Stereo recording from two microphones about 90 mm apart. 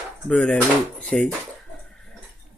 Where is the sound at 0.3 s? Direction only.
10° left (ahead or behind).